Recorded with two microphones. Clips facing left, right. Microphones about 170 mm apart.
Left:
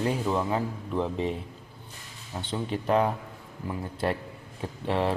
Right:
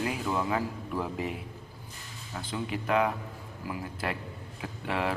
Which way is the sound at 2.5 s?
30° left (ahead or behind).